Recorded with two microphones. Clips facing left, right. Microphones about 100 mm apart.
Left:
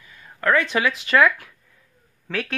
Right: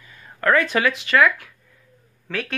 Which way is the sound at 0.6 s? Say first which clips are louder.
Right 1 dB; 15° left (ahead or behind).